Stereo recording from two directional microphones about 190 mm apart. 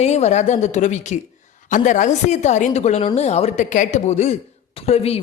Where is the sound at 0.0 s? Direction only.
35° left (ahead or behind).